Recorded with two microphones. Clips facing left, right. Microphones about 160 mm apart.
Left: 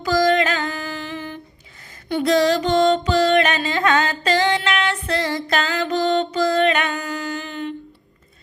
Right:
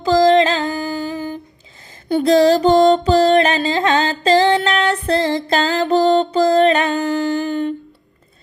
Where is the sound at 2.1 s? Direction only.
30° right (ahead or behind).